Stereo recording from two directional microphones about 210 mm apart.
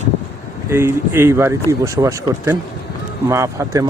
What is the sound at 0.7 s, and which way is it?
Speech, 10° right (ahead or behind).